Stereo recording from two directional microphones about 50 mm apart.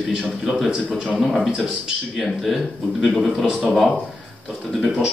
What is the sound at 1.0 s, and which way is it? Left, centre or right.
A man's voice, centre.